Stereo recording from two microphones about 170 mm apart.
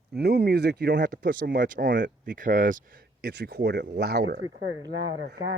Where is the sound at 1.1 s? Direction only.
55° right (ahead or behind).